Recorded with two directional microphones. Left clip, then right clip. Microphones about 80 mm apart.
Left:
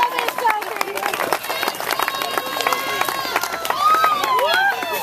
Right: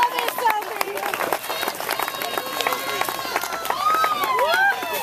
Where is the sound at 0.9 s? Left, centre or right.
Left.